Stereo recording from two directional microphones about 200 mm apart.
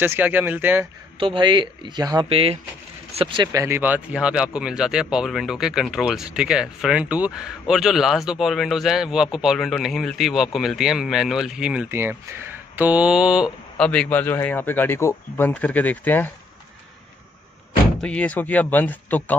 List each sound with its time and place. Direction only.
0.0 s speech: 10° right (ahead or behind)
1.2 s speech: 25° right (ahead or behind); by 16.3 s 10° left (ahead or behind)
18.0 s speech: 5° left (ahead or behind)